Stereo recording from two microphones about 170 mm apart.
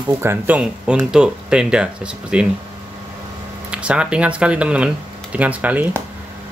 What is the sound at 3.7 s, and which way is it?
Speech, 5° right (ahead or behind).